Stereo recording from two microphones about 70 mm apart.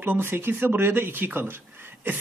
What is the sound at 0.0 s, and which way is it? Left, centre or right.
Speech, right.